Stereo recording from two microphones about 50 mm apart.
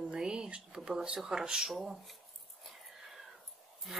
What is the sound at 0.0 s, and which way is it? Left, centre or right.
Speech, centre.